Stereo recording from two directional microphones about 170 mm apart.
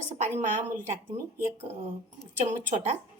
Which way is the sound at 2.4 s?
45° right (ahead or behind).